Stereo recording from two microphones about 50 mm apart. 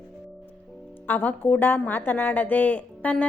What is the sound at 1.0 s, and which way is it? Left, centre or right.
A woman's voice, left.